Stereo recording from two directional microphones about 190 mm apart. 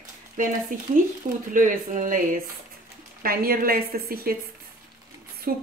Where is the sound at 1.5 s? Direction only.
45° right (ahead or behind).